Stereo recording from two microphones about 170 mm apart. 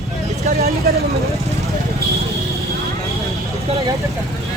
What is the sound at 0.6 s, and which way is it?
Speech, 65° right (ahead or behind).